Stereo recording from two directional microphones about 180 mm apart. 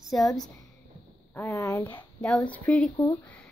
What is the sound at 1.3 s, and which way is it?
Speech, 15° left (ahead or behind).